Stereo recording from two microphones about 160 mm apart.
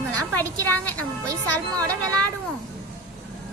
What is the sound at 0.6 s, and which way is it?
Speech, 10° left (ahead or behind).